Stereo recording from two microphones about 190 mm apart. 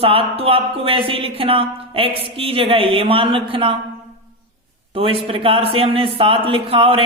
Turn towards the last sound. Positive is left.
turn(degrees=-30)  # may be behind; listen again after turning